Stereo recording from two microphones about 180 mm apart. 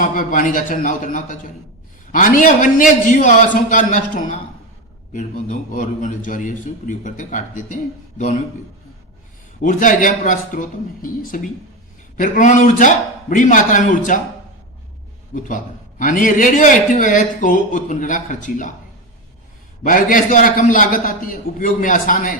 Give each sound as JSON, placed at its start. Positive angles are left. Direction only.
{"t": 0.0, "sound": "a man's voice", "side_deg": 45}
{"t": 9.6, "sound": "a man's voice", "side_deg": 45}
{"t": 15.4, "sound": "a man's voice", "side_deg": 45}
{"t": 19.8, "sound": "a man's voice", "side_deg": 50}